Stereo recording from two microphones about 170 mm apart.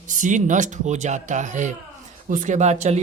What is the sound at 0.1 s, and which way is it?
Speech, 50° right (ahead or behind).